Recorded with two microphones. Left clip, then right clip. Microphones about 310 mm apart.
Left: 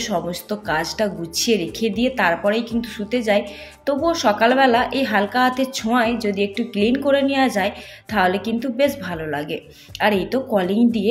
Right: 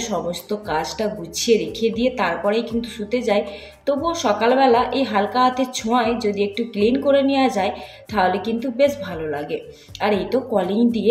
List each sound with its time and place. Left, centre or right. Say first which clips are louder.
0.0 s speech: left 1 dB; left